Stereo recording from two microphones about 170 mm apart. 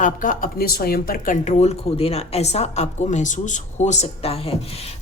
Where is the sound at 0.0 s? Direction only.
50° left (ahead or behind).